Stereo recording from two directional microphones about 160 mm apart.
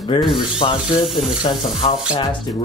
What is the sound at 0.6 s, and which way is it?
Speech, 35° left (ahead or behind).